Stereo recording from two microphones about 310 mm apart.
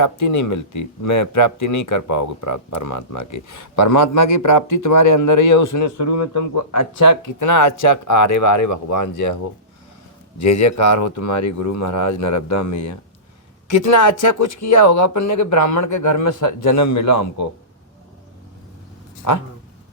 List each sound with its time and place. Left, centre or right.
0.0 s speech: left
10.4 s speech: left